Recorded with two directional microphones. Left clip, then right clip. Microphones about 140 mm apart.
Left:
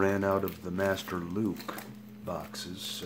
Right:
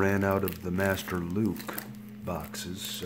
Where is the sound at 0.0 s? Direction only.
5° right (ahead or behind).